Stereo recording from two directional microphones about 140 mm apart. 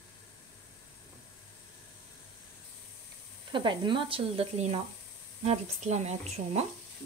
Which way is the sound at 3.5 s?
35° right (ahead or behind).